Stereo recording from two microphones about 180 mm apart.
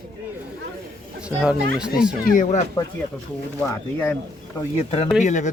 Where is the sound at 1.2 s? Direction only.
5° right (ahead or behind).